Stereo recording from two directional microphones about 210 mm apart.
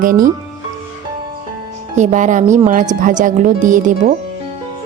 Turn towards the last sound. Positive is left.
turn(degrees=-40)  # may be behind; listen again after turning